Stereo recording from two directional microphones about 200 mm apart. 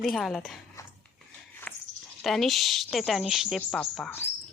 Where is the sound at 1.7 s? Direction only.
5° left (ahead or behind).